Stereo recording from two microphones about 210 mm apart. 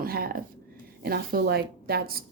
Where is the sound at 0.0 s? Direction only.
45° right (ahead or behind).